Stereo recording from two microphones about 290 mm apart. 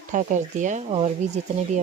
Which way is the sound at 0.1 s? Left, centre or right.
Right.